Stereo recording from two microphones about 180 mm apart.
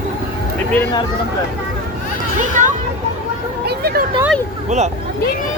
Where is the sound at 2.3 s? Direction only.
40° right (ahead or behind).